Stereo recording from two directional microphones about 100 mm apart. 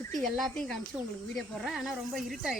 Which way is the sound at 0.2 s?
Centre (ahead or behind).